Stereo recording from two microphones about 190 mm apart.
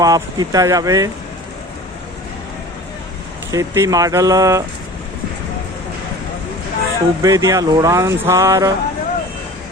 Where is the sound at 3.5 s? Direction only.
15° right (ahead or behind).